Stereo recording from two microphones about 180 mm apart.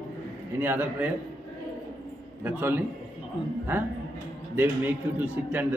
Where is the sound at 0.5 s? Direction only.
10° right (ahead or behind).